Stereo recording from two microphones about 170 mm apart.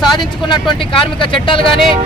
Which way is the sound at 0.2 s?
25° left (ahead or behind).